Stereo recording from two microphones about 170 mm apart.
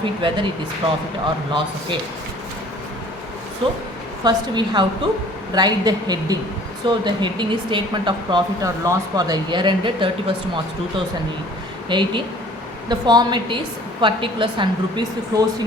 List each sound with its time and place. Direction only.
0.0 s speech: 30° right (ahead or behind)
3.6 s speech: 30° right (ahead or behind)